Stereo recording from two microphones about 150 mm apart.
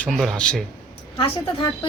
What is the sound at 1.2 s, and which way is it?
Speech, 35° left (ahead or behind).